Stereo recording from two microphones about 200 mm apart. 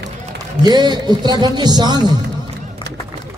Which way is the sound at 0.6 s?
20° right (ahead or behind).